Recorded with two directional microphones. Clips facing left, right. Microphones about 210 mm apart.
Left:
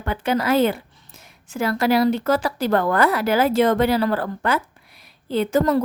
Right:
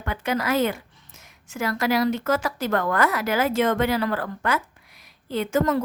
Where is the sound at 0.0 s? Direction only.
30° left (ahead or behind).